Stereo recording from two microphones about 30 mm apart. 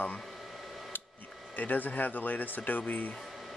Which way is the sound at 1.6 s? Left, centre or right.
Left.